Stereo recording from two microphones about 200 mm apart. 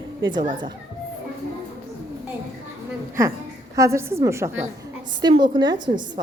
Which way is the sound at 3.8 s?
15° right (ahead or behind).